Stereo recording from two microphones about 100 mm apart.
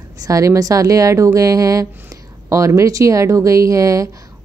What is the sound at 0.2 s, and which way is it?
A woman's voice, 35° right (ahead or behind).